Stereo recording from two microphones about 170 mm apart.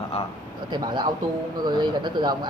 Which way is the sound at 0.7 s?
25° right (ahead or behind).